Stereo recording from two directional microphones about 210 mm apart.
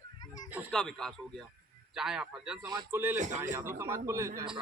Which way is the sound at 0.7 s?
5° left (ahead or behind).